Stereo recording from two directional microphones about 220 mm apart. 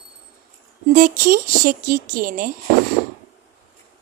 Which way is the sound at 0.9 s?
40° right (ahead or behind).